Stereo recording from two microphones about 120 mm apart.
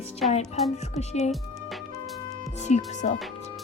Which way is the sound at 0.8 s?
70° left (ahead or behind).